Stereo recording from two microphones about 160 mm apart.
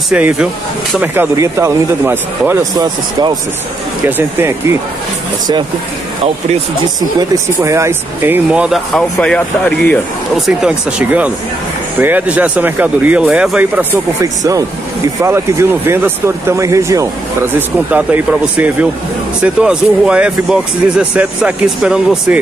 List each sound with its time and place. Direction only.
0.1 s speech: 10° right (ahead or behind)
2.8 s speech: 25° right (ahead or behind)
4.4 s speech: 15° right (ahead or behind)
7.2 s speech: 20° right (ahead or behind)
14.2 s speech: 20° right (ahead or behind); by 22.4 s 5° right (ahead or behind)